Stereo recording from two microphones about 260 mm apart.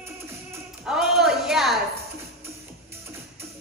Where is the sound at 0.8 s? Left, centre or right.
Centre.